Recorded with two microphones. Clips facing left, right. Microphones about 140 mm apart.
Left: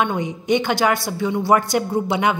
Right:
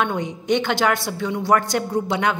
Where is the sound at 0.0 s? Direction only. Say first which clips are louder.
Left 2 dB; 5° left (ahead or behind).